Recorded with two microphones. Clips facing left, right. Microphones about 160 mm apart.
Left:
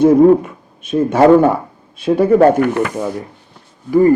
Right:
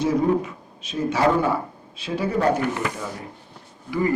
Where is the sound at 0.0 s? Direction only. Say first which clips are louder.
Left 12 dB; 55° left (ahead or behind).